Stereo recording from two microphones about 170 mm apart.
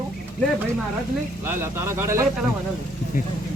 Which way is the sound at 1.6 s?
15° right (ahead or behind).